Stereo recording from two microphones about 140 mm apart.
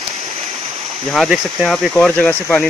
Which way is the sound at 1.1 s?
Centre (ahead or behind).